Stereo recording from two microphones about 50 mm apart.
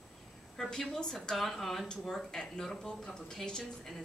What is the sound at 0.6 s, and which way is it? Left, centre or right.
A woman's voice, centre.